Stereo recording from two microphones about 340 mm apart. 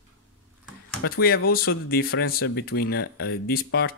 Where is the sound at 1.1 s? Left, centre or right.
Left.